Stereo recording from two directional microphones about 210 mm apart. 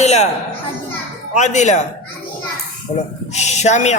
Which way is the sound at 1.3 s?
35° left (ahead or behind).